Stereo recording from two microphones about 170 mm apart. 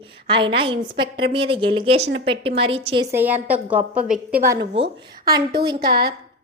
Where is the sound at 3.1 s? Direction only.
10° right (ahead or behind).